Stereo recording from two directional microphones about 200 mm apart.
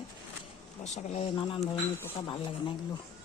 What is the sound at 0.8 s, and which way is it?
Speech, 35° left (ahead or behind).